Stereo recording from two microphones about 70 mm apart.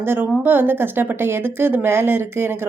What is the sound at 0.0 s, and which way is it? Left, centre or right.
Speech, right.